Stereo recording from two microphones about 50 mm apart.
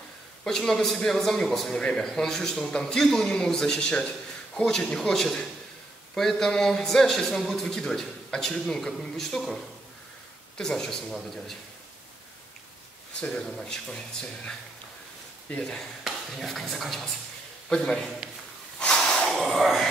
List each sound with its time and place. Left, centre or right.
0.4 s a man's voice: centre
10.6 s a man's voice: centre
13.2 s a man's voice: centre
16.0 s speech: centre
17.6 s a man's voice: centre
18.8 s snort: centre
19.3 s a sound: centre